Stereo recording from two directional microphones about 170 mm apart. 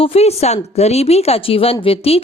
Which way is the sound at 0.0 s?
35° left (ahead or behind).